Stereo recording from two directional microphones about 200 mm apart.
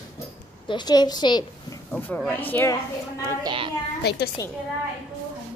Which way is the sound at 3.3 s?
20° right (ahead or behind).